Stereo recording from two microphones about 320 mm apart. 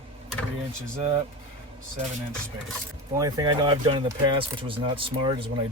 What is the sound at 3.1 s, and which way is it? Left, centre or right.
Speech, centre.